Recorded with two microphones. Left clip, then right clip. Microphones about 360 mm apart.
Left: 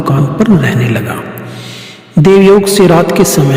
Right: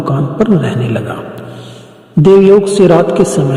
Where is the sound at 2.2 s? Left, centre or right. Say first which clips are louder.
Even; left.